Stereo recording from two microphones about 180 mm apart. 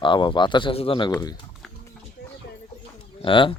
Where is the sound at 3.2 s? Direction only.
30° left (ahead or behind).